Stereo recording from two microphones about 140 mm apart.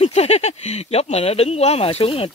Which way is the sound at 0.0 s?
50° left (ahead or behind).